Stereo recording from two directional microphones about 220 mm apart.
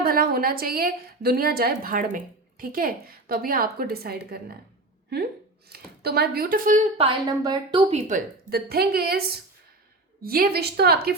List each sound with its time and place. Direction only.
0.0 s a woman's voice: 40° right (ahead or behind)
5.7 s speech: 45° right (ahead or behind)
6.9 s a woman's voice: 25° right (ahead or behind); by 11.1 s 45° right (ahead or behind)